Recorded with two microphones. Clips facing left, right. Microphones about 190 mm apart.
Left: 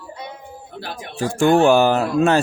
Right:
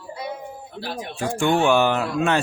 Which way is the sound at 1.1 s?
40° left (ahead or behind).